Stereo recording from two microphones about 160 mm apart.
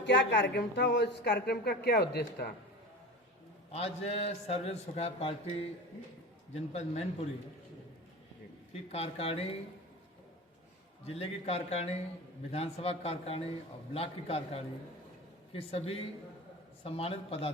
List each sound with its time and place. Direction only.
0.0 s speech: 90° left
3.7 s a man's voice: 40° left (ahead or behind)
8.7 s a man's voice: 40° left (ahead or behind)
11.0 s a man's voice: 40° left (ahead or behind)